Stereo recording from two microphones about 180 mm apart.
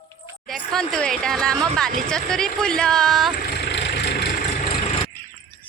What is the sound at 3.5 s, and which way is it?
Vehicle, 70° left (ahead or behind).